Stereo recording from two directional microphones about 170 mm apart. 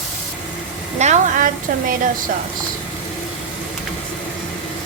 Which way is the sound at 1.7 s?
50° right (ahead or behind).